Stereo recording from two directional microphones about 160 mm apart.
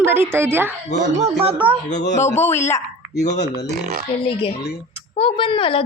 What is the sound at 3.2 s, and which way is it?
Speech, 90° left.